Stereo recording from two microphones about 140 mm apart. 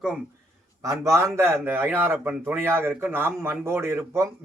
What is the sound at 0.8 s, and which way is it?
A man's voice, 20° right (ahead or behind).